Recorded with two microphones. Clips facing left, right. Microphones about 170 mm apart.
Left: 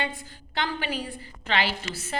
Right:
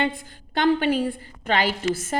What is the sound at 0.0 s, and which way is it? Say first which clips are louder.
A woman's voice: right 7 dB; 50° right (ahead or behind).